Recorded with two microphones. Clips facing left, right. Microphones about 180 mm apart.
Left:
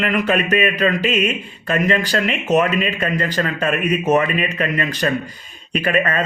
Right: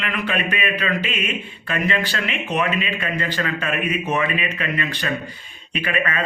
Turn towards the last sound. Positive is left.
turn(degrees=40)  # may be behind; listen again after turning